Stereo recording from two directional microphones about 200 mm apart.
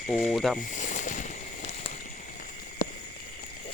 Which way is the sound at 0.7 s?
40° left (ahead or behind).